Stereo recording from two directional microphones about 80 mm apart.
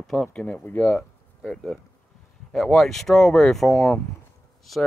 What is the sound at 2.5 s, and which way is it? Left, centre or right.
Speech, centre.